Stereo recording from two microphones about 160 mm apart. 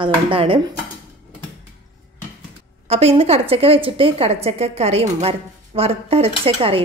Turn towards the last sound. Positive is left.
turn(degrees=-35)  # may be behind; listen again after turning